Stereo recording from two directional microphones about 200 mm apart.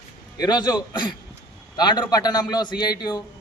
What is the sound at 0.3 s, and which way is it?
A man's voice, 20° left (ahead or behind).